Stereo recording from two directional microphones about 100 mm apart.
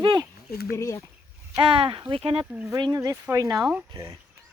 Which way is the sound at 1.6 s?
65° right (ahead or behind).